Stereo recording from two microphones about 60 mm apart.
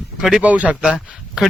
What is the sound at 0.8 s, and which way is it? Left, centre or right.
Speech, centre.